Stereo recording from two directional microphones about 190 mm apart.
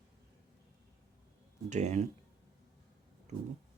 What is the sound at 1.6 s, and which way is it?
Speech, 35° right (ahead or behind).